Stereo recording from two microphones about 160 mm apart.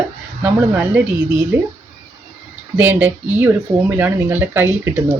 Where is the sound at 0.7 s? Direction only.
10° right (ahead or behind).